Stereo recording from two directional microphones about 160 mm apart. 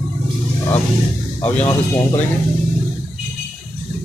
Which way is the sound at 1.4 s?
10° left (ahead or behind).